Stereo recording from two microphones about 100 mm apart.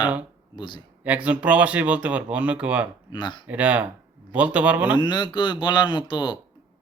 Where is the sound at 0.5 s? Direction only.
50° left (ahead or behind).